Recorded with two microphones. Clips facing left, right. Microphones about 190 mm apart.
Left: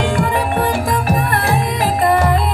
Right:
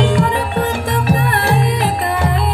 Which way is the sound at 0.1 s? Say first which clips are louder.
Right 1 dB; 50° left (ahead or behind).